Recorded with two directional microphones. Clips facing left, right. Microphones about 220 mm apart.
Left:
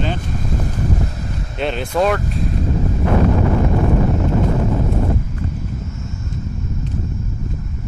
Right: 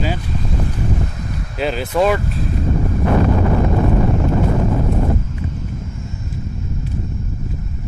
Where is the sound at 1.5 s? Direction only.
5° right (ahead or behind).